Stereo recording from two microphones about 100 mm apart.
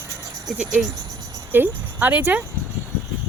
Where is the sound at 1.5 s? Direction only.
20° right (ahead or behind).